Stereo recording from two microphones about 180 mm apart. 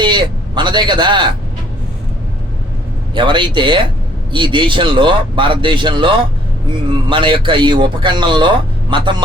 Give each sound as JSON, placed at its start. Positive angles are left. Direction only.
{"t": 0.0, "sound": "a man's voice", "side_deg": -25}
{"t": 3.2, "sound": "a man's voice", "side_deg": -25}